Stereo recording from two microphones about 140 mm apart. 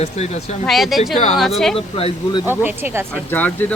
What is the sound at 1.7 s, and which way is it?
Speech, 45° left (ahead or behind).